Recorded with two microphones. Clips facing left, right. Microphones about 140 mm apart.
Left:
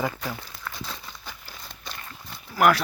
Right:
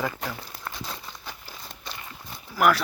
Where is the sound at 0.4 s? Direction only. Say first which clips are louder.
Right 1 dB; 35° right (ahead or behind).